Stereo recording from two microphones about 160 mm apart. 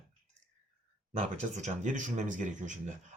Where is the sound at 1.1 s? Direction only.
45° right (ahead or behind).